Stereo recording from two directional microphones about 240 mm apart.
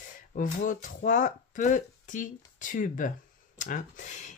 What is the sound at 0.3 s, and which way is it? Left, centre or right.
Speech, left.